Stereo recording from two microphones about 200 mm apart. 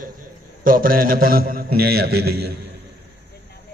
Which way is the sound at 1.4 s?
45° right (ahead or behind).